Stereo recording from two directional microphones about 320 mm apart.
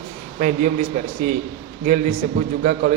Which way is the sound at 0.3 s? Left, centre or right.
Right.